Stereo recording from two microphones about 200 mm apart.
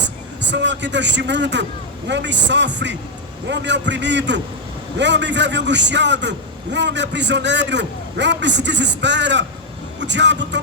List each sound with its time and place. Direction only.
0.4 s a man's voice: 60° right (ahead or behind)